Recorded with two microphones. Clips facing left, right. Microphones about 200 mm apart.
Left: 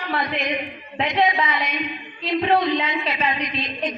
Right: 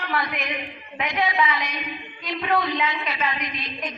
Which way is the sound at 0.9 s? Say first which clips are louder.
Left 3 dB; 35° left (ahead or behind).